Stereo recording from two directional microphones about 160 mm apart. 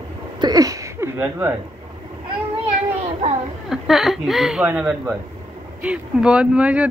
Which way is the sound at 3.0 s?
45° right (ahead or behind).